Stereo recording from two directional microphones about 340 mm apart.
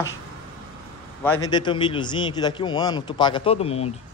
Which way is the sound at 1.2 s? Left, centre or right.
Centre.